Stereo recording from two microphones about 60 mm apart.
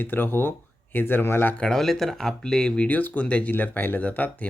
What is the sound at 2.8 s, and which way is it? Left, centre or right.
Speech, left.